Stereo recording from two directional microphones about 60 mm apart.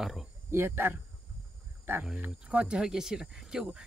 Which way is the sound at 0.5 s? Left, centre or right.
Right.